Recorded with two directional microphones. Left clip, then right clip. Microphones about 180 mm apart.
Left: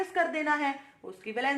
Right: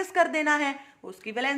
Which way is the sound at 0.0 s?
45° right (ahead or behind).